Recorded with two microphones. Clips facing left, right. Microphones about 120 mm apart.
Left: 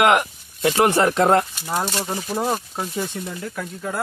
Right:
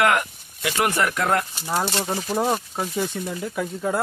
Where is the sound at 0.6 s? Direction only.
30° left (ahead or behind).